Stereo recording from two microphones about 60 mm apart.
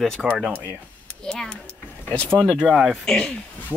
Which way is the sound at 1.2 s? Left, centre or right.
Centre.